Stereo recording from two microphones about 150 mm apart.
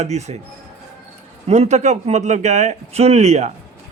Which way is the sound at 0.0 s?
50° right (ahead or behind).